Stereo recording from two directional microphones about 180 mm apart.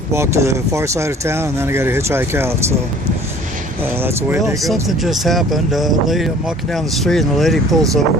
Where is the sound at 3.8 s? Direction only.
10° right (ahead or behind).